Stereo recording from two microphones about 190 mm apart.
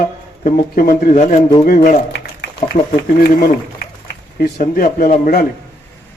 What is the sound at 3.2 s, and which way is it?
Speech, 50° left (ahead or behind).